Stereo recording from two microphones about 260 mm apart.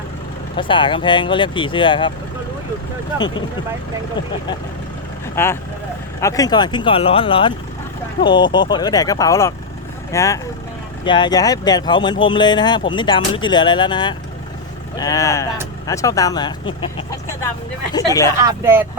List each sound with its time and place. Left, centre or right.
0.5 s speech: centre
5.3 s speech: centre
17.9 s speech: centre
18.4 s speech: centre